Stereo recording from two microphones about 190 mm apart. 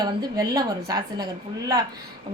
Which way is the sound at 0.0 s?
20° right (ahead or behind).